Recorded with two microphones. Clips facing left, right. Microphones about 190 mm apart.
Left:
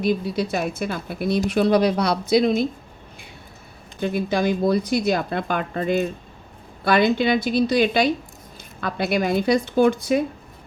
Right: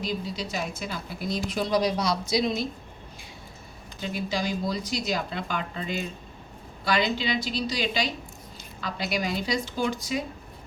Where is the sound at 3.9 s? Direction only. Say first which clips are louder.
Left 8 dB; 55° left (ahead or behind).